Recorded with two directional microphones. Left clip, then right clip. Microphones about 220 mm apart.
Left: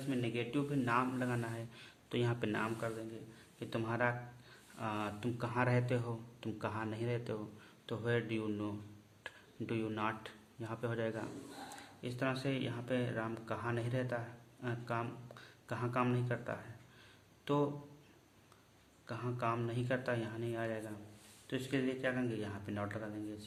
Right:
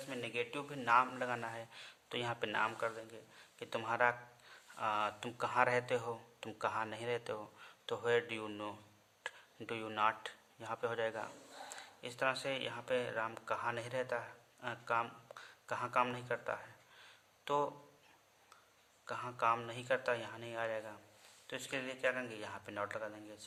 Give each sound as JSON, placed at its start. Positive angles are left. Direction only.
{"t": 0.1, "sound": "speech", "side_deg": -25}
{"t": 19.0, "sound": "speech", "side_deg": -25}